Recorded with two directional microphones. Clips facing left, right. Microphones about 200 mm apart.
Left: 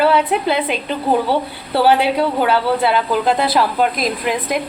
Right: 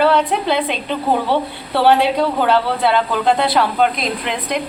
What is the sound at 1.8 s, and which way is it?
A man's voice, 5° left (ahead or behind).